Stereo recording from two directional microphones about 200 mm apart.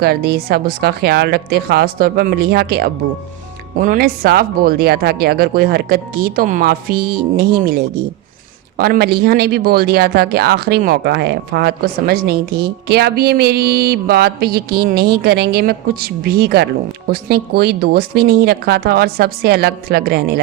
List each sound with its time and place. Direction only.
0.0 s speech: 55° right (ahead or behind)